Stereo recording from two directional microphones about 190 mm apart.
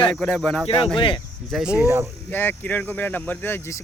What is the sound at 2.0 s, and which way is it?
Speech, 10° left (ahead or behind).